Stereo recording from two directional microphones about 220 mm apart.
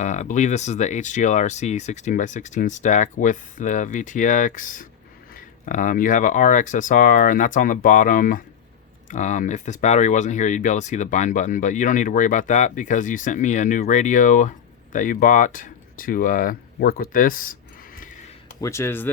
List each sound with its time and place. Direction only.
0.0 s speech: 35° left (ahead or behind)
18.6 s speech: 10° left (ahead or behind)